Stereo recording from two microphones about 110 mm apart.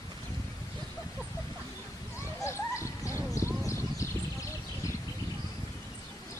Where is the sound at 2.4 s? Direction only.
25° left (ahead or behind).